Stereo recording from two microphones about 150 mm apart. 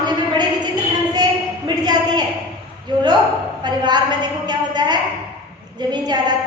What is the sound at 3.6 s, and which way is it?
A woman's voice, 30° right (ahead or behind).